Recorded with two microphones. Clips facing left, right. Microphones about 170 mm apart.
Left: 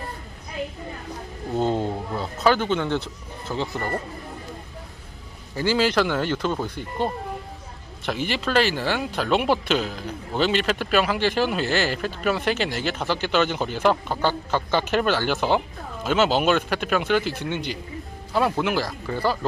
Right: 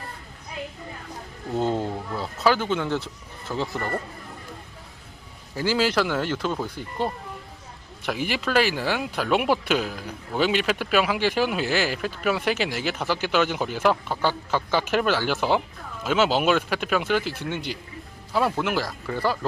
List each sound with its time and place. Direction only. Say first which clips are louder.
1.5 s a man's voice: left 1 dB; centre (ahead or behind)
3.8 s speech: left 1 dB; 20° left (ahead or behind)
5.5 s speech: left 2 dB; 5° right (ahead or behind)